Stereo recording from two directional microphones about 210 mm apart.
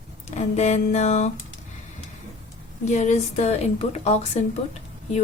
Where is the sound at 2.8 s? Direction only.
35° left (ahead or behind).